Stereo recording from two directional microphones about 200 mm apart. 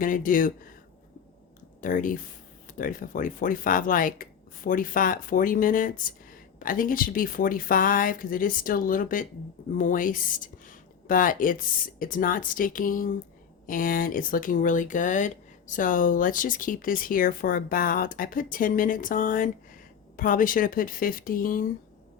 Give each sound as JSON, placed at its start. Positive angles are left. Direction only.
{"t": 0.0, "sound": "speech", "side_deg": 40}
{"t": 1.8, "sound": "speech", "side_deg": 40}